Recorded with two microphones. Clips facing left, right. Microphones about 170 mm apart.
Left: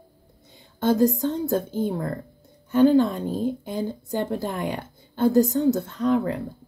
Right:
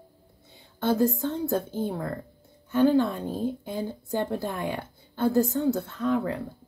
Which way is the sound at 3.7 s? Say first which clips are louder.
Left 2 dB; 15° left (ahead or behind).